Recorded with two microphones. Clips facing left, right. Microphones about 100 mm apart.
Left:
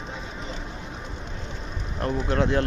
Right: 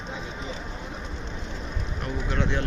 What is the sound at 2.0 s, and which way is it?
Speech, 40° left (ahead or behind).